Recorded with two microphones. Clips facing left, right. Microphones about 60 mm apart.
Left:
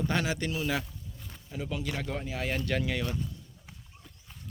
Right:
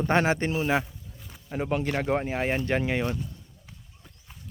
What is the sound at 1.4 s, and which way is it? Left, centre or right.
Speech, right.